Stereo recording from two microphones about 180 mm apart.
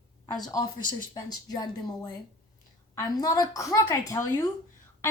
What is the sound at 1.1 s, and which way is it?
Speech, 20° left (ahead or behind).